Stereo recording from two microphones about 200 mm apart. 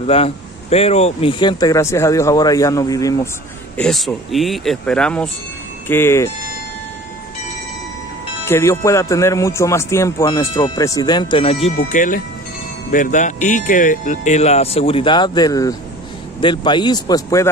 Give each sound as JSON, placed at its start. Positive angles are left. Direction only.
{"t": 0.0, "sound": "speech", "side_deg": 30}
{"t": 3.7, "sound": "speech", "side_deg": 0}
{"t": 8.5, "sound": "speech", "side_deg": 15}
{"t": 11.7, "sound": "speech", "side_deg": 40}